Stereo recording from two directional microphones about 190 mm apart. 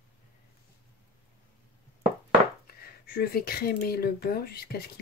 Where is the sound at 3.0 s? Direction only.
55° left (ahead or behind).